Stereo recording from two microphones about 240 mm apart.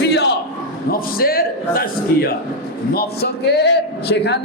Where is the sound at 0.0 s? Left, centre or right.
Left.